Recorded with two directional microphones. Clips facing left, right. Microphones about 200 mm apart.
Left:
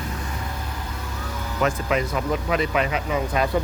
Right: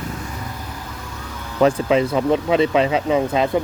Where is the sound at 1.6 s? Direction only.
30° right (ahead or behind).